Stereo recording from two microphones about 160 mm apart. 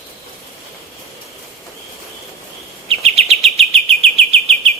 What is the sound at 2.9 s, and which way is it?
Bird vocalization, 40° right (ahead or behind).